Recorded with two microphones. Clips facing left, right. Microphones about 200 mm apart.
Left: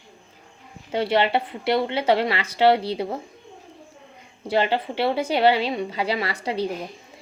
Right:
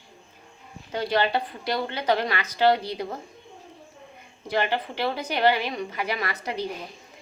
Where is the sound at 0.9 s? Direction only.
25° left (ahead or behind).